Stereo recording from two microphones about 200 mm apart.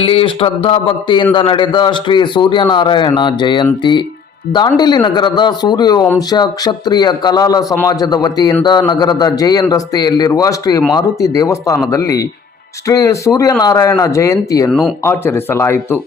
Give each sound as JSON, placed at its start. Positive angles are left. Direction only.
{"t": 0.0, "sound": "speech", "side_deg": 30}
{"t": 14.7, "sound": "speech", "side_deg": 0}
{"t": 15.0, "sound": "speech", "side_deg": 10}